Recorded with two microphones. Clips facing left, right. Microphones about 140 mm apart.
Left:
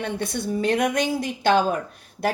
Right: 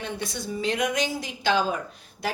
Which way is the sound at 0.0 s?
55° left (ahead or behind).